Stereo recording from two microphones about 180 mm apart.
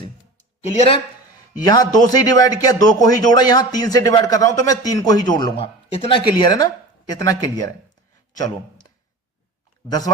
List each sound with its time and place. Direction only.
0.6 s speech: 35° left (ahead or behind)
1.6 s a man's voice: 20° left (ahead or behind)